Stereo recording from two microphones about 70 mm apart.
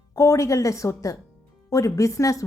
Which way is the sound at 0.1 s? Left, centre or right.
Left.